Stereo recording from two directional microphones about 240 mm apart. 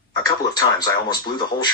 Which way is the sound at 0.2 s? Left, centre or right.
Centre.